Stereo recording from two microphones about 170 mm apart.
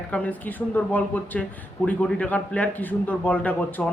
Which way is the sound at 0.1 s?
10° left (ahead or behind).